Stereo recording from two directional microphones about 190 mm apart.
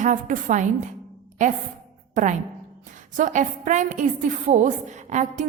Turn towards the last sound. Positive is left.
turn(degrees=-40)  # may be behind; listen again after turning